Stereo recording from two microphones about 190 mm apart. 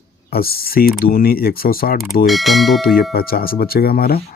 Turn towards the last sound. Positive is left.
turn(degrees=55)  # may be behind; listen again after turning